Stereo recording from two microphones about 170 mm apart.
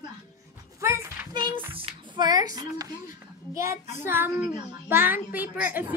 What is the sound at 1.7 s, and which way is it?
Child singing, 30° right (ahead or behind).